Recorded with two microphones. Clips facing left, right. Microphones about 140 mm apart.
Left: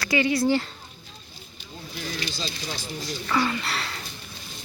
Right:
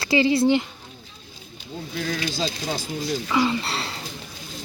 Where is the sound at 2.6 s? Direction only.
50° right (ahead or behind).